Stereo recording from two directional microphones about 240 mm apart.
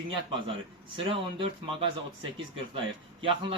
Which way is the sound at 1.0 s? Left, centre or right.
Right.